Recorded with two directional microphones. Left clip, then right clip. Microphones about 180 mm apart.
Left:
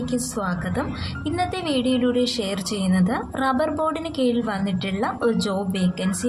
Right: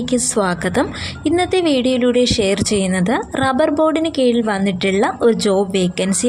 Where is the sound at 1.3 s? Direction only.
35° right (ahead or behind).